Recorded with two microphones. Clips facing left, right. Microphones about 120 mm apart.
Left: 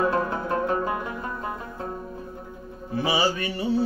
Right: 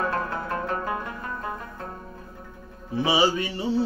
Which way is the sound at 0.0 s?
20° left (ahead or behind).